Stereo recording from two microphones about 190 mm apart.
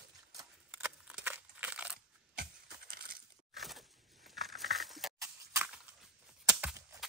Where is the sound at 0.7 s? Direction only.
5° right (ahead or behind).